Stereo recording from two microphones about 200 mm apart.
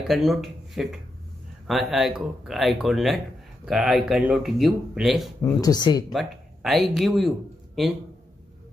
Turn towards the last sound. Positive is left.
turn(degrees=0)  # may be behind; listen again after turning